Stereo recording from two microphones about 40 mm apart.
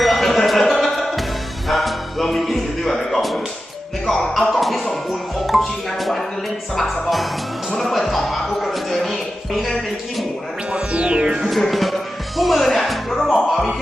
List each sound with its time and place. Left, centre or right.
0.0 s music: centre
2.9 s a sound: centre
4.2 s music: centre
10.7 s music: right
11.4 s music: centre